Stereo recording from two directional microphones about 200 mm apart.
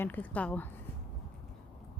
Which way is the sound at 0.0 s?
10° left (ahead or behind).